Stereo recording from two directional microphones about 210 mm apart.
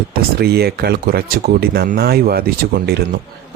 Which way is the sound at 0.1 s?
45° right (ahead or behind).